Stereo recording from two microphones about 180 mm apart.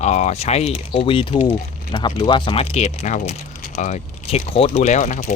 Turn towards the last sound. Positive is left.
turn(degrees=45)  # may be behind; listen again after turning